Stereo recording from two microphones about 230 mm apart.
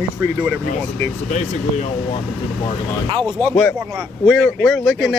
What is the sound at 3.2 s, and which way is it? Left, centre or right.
Speech, centre.